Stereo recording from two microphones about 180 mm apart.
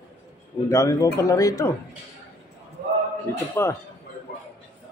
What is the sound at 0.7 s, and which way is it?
Speech, 20° left (ahead or behind).